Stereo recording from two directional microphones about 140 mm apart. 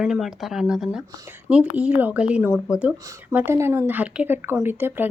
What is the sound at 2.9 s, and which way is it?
Speech, 25° right (ahead or behind).